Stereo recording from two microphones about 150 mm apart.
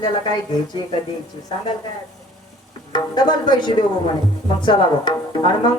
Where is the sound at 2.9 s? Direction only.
30° left (ahead or behind).